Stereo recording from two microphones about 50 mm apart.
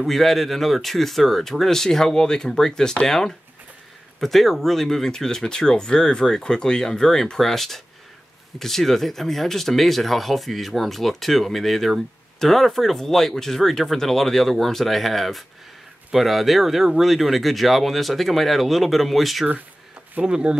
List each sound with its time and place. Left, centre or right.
0.0 s speech: centre
20.2 s speech: centre